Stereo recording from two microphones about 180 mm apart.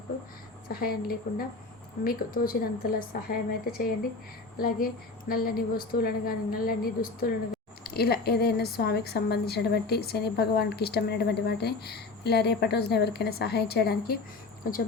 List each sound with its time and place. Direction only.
0.7 s a woman's voice: 55° left (ahead or behind)